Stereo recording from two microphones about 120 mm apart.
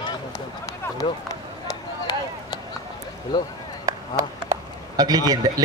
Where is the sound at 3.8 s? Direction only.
25° right (ahead or behind).